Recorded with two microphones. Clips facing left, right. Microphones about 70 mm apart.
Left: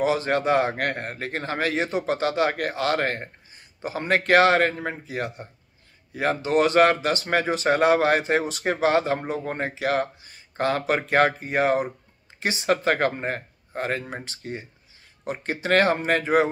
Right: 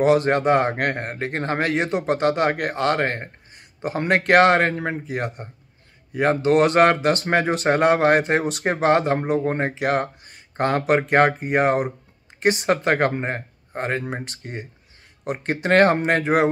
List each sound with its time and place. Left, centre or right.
0.0 s a man's voice: right
3.5 s a sound: right
4.3 s a man's voice: right